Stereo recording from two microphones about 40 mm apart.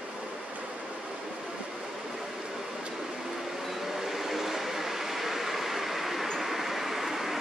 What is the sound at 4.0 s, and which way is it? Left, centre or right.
Vehicle, centre.